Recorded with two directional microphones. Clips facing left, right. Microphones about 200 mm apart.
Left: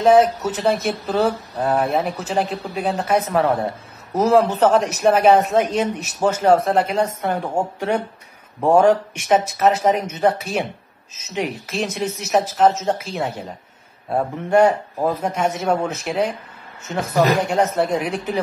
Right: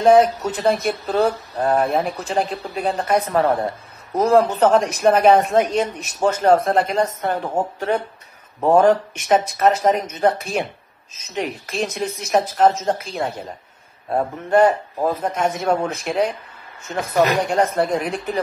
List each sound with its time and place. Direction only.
0.0 s speech: 5° left (ahead or behind)
16.8 s speech: 5° left (ahead or behind)